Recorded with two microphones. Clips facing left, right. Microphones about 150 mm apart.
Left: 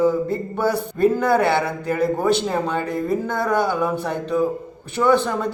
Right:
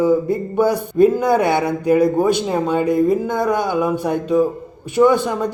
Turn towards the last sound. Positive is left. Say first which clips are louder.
# right 3 dB
turn(degrees=-15)  # may be behind; listen again after turning